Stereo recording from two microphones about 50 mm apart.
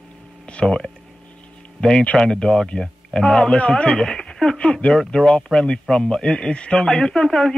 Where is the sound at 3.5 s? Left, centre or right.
Centre.